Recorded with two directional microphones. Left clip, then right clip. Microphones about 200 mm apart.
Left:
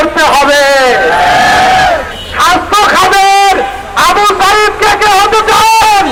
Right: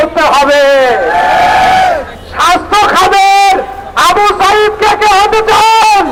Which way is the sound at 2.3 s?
40° right (ahead or behind).